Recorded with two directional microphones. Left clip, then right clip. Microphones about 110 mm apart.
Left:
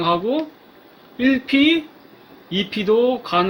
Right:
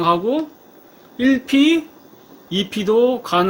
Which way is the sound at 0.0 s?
15° right (ahead or behind).